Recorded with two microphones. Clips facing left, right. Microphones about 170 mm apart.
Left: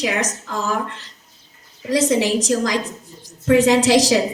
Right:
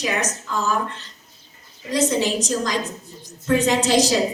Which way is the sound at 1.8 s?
90° left.